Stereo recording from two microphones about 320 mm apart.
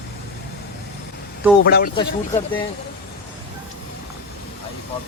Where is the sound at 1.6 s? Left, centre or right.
Left.